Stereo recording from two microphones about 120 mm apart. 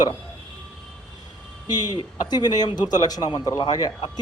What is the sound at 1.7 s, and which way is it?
A woman's voice, 35° left (ahead or behind).